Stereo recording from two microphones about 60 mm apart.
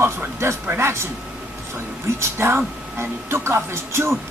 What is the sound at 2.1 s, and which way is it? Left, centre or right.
Speech, right.